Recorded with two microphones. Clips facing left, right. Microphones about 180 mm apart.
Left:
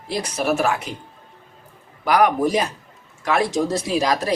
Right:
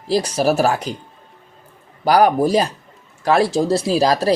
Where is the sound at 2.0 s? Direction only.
35° right (ahead or behind).